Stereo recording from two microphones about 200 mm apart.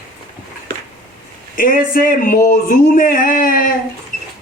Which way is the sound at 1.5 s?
45° left (ahead or behind).